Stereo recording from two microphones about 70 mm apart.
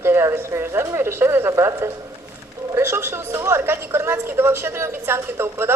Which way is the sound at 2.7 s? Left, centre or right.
Right.